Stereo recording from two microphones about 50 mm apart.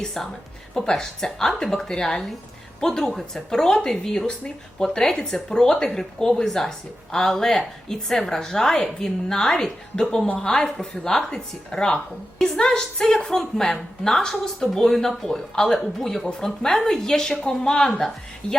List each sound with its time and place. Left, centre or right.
0.0 s a woman's voice: centre